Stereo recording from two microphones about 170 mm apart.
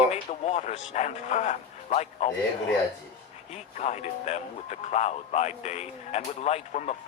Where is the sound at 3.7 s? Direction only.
40° left (ahead or behind).